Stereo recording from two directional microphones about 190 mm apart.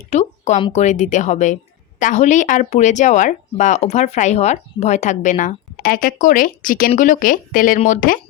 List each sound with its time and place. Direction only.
0.1 s speech: 35° left (ahead or behind)